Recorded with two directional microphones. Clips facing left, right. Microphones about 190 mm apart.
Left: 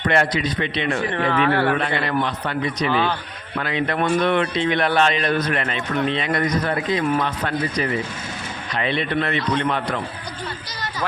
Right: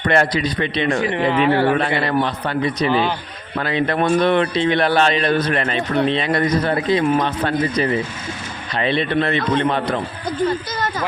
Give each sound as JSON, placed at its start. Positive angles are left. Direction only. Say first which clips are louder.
{"t": 0.1, "sound": "a man's voice", "louder": "right 4 dB", "side_deg": -40}
{"t": 1.1, "sound": "speech", "louder": "right 2 dB", "side_deg": -15}
{"t": 2.0, "sound": "a man's voice", "louder": "right 3 dB", "side_deg": -35}
{"t": 10.8, "sound": "speech", "louder": "right 8 dB", "side_deg": -50}